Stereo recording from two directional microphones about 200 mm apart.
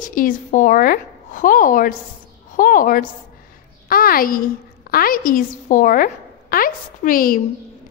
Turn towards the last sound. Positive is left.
turn(degrees=45)  # may be behind; listen again after turning